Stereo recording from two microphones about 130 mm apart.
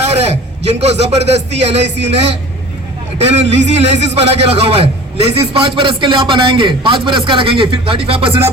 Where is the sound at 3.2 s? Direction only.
55° right (ahead or behind).